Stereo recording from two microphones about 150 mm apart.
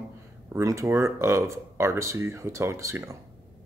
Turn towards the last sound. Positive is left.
turn(degrees=-20)  # may be behind; listen again after turning